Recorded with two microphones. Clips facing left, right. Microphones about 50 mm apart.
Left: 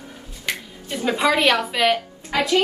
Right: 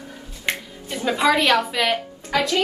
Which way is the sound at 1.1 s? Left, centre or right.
Centre.